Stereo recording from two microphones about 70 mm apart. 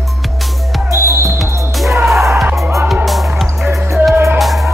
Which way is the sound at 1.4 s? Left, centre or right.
Centre.